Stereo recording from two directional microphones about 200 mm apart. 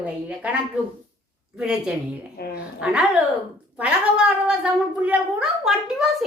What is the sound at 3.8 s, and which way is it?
A child's voice, 5° right (ahead or behind).